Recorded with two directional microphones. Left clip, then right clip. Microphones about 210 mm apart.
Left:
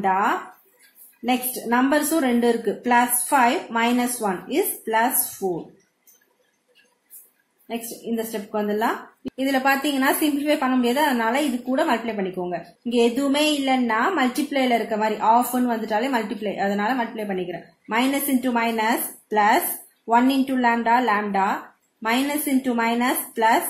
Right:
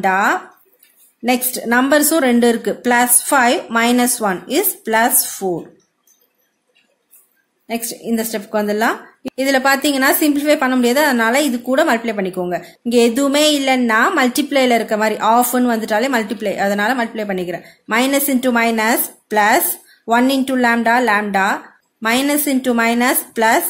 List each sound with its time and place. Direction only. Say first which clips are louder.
0.0 s a woman's voice: right 6 dB; 50° right (ahead or behind)
7.6 s a woman's voice: right 7 dB; 50° right (ahead or behind)